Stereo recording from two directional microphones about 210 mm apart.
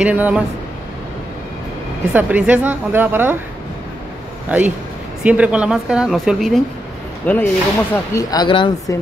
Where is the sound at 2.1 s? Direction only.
10° right (ahead or behind).